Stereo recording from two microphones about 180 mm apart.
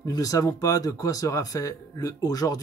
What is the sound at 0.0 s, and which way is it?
Speech, 20° left (ahead or behind).